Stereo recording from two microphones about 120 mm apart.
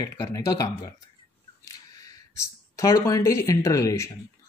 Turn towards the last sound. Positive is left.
turn(degrees=25)  # may be behind; listen again after turning